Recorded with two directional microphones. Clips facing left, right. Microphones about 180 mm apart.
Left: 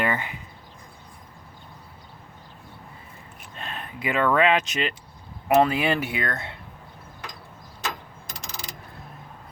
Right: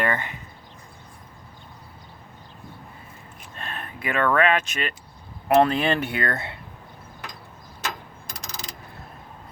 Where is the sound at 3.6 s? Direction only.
15° left (ahead or behind).